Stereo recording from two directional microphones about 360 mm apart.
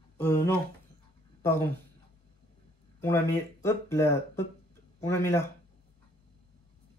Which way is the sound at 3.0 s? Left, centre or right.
Centre.